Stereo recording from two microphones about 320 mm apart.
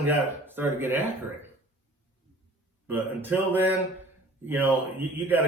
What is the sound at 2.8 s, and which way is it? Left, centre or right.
A man's voice, centre.